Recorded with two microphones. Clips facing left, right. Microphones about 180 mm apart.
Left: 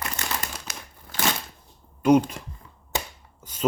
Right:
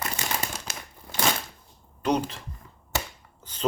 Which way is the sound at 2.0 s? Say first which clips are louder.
Left 7 dB; 10° left (ahead or behind).